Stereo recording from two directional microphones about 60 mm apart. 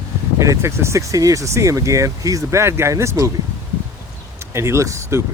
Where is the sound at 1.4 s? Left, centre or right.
Right.